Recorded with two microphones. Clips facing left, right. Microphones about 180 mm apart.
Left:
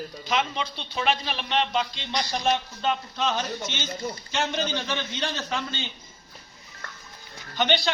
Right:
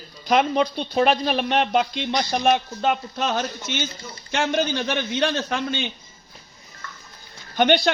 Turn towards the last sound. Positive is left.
turn(degrees=-50)  # may be behind; listen again after turning